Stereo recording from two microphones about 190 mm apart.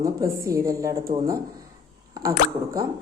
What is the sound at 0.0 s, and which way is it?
A woman's voice, 15° right (ahead or behind).